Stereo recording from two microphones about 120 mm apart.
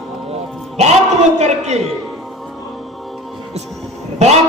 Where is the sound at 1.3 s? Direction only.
70° right (ahead or behind).